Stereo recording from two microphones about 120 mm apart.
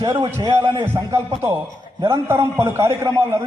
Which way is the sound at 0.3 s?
25° right (ahead or behind).